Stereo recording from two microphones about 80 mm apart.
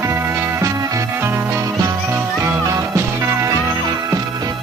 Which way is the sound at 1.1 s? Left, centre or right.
Right.